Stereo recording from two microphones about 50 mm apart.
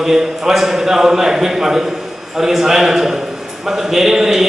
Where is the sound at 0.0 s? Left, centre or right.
Centre.